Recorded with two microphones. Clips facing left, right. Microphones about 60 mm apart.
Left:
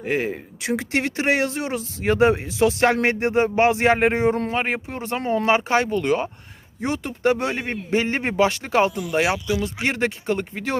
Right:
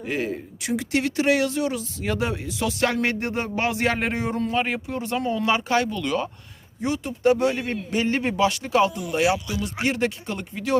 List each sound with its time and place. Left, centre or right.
0.0 s speech: left